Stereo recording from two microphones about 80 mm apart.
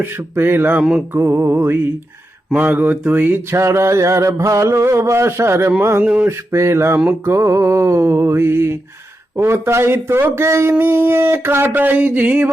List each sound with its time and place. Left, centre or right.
0.0 s speech: right
3.5 s speech: right
6.0 s a sound: centre
6.2 s speech: right